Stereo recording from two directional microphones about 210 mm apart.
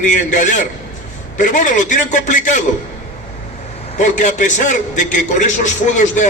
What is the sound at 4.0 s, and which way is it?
A man's voice, 35° left (ahead or behind).